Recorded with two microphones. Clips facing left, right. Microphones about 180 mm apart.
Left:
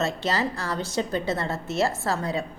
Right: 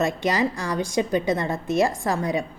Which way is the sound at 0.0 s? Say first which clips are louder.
Right 3 dB; 15° right (ahead or behind).